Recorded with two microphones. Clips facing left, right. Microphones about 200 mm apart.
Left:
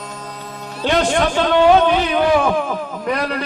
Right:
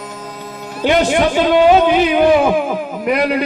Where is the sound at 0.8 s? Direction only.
5° right (ahead or behind).